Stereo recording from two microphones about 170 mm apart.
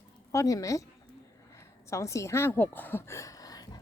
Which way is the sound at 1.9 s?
15° left (ahead or behind).